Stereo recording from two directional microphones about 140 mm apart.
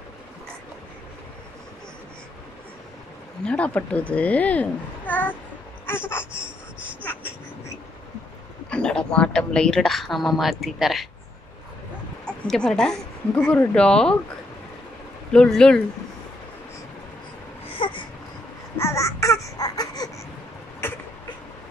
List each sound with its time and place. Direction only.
3.4 s a child's voice: 10° left (ahead or behind)
5.9 s a sound: 15° left (ahead or behind)
8.6 s a woman's voice: 5° left (ahead or behind)
12.3 s a woman's voice: 5° left (ahead or behind)
15.3 s a woman's voice: 5° left (ahead or behind)
17.7 s baby cry: 35° left (ahead or behind)
18.8 s baby cry: 20° left (ahead or behind)
20.8 s a sound: 15° left (ahead or behind)